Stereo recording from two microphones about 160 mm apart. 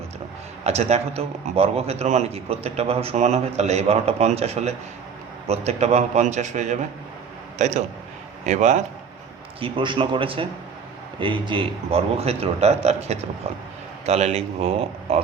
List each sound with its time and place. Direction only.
0.6 s a man's voice: 40° right (ahead or behind)
8.4 s a man's voice: 45° right (ahead or behind)
9.6 s a man's voice: 35° right (ahead or behind)